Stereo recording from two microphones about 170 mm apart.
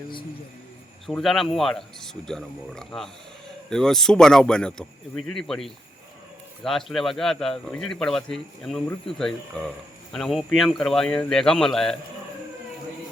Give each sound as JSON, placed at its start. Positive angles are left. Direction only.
{"t": 1.0, "sound": "speech", "side_deg": 0}